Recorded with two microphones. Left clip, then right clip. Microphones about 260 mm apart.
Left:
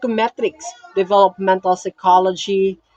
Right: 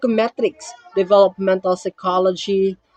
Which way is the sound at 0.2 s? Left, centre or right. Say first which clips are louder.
Even; centre.